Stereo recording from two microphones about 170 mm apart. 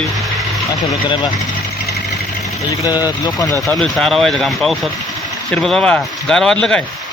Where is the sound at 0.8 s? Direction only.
30° left (ahead or behind).